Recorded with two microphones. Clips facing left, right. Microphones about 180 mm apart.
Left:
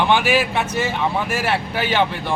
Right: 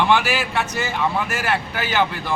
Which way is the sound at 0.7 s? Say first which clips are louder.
Left 2 dB; 30° left (ahead or behind).